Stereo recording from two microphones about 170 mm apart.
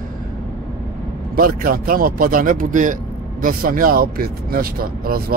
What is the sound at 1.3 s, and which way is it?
Speech, 60° right (ahead or behind).